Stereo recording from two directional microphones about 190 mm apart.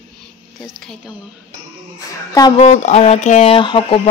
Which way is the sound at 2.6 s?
35° left (ahead or behind).